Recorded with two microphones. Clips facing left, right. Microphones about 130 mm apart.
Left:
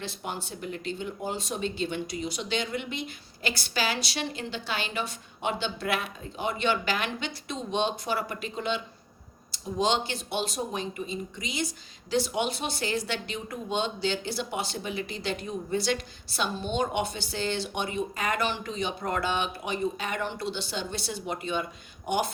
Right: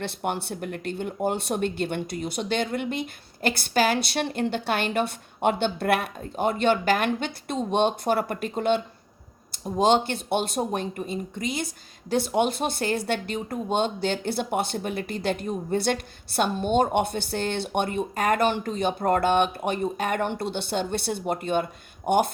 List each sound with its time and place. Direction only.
0.0 s speech: 60° right (ahead or behind)